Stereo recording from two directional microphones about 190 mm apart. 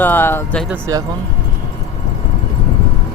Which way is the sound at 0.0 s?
10° left (ahead or behind).